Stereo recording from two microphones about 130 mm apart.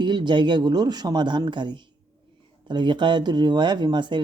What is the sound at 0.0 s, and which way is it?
Speech, 35° right (ahead or behind).